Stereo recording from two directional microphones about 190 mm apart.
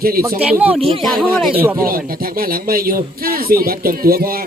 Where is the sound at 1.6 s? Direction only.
10° right (ahead or behind).